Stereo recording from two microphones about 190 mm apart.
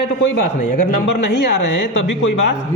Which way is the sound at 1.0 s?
65° left (ahead or behind).